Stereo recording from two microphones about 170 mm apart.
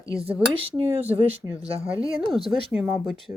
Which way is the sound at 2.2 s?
30° right (ahead or behind).